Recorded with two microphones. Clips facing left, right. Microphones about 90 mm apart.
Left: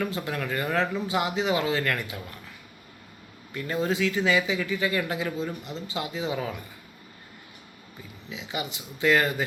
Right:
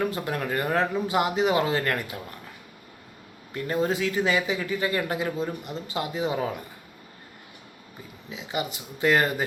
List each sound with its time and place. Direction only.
0.3 s speech: 40° right (ahead or behind)
3.5 s speech: 35° right (ahead or behind)
8.3 s speech: 40° right (ahead or behind)